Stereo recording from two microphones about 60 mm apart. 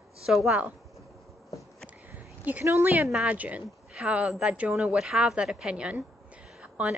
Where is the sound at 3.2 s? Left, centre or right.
Right.